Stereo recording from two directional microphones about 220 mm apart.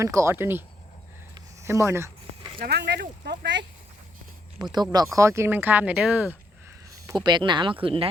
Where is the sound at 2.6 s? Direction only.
50° right (ahead or behind).